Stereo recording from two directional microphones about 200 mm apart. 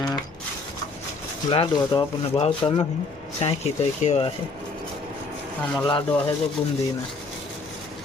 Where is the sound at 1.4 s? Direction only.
20° left (ahead or behind).